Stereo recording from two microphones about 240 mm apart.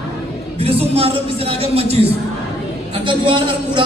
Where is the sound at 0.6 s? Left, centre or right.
Right.